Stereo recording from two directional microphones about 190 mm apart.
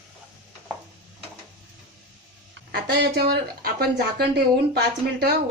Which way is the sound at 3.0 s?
55° right (ahead or behind).